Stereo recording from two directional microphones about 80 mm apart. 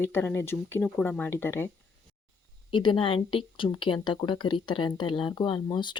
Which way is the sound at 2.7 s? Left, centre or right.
Left.